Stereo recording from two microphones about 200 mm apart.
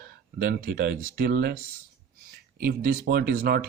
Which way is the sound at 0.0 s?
45° right (ahead or behind).